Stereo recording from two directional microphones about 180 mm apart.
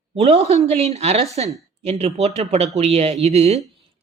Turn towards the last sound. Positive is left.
turn(degrees=-35)  # may be behind; listen again after turning